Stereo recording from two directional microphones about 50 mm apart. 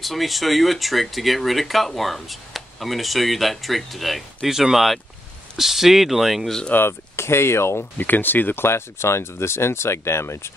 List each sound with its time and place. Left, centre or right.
0.0 s speech: centre
6.7 s speech: left
8.0 s speech: left
8.6 s speech: left